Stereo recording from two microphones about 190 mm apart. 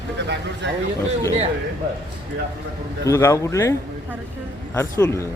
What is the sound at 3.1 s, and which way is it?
A man's voice, 15° left (ahead or behind).